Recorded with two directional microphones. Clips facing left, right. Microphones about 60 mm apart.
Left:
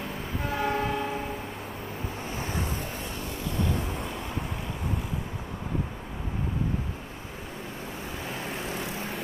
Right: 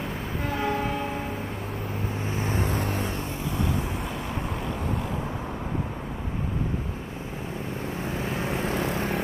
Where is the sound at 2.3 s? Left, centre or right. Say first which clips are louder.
Right 5 dB; right.